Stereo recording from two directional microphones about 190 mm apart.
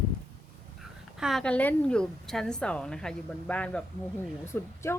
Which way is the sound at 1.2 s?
5° left (ahead or behind).